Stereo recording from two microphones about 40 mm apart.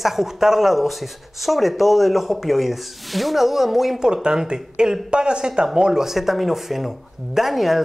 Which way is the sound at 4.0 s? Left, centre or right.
Right.